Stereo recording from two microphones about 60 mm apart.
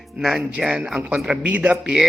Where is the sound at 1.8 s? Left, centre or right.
Centre.